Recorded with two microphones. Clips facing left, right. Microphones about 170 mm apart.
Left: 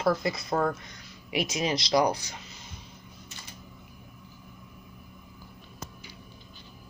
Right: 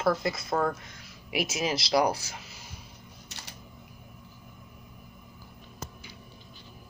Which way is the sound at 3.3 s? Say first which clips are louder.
Right 1 dB; 75° right (ahead or behind).